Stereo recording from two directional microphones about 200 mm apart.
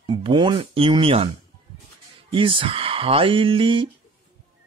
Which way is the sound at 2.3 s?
25° right (ahead or behind).